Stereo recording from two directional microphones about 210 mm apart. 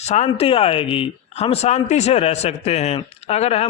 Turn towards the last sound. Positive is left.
turn(degrees=30)  # may be behind; listen again after turning